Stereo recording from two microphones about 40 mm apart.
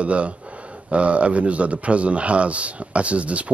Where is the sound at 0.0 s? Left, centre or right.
Right.